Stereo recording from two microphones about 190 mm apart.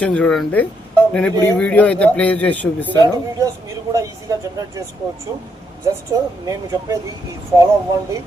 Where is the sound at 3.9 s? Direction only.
15° right (ahead or behind).